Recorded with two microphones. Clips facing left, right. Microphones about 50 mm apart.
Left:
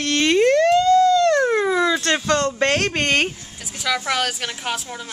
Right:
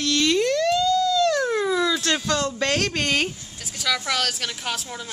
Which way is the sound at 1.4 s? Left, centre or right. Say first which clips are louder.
Left 4 dB; left.